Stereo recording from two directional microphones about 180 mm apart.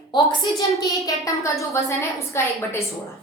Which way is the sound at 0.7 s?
20° left (ahead or behind).